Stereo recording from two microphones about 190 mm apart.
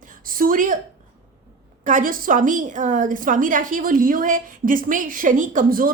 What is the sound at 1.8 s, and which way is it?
Speech, 40° right (ahead or behind).